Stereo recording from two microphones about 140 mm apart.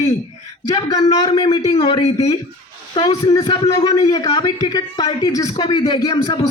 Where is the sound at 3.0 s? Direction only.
30° left (ahead or behind).